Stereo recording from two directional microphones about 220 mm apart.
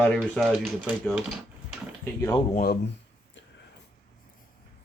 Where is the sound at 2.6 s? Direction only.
45° left (ahead or behind).